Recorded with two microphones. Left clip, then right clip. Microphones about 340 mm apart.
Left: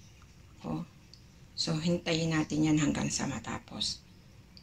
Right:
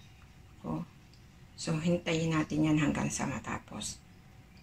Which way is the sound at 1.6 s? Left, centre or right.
Centre.